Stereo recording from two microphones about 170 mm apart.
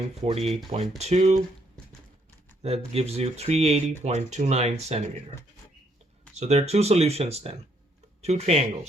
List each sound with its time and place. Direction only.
0.2 s speech: 35° right (ahead or behind)
2.6 s speech: 35° right (ahead or behind)
6.3 s speech: 40° right (ahead or behind)